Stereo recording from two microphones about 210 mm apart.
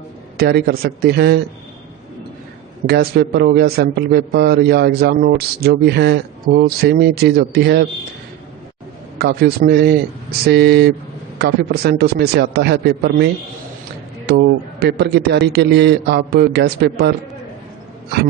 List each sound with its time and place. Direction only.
0.4 s a man's voice: 50° right (ahead or behind)
2.9 s a man's voice: 45° right (ahead or behind)
9.2 s a man's voice: 45° right (ahead or behind)